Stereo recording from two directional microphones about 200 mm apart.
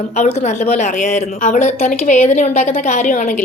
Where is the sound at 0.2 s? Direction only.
35° left (ahead or behind).